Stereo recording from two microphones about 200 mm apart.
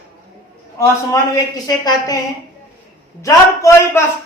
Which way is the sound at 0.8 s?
15° left (ahead or behind).